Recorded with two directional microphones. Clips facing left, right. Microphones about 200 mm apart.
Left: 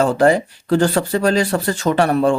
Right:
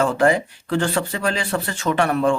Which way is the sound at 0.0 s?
35° left (ahead or behind).